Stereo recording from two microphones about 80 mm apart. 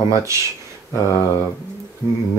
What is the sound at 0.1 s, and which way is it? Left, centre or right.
Speech, right.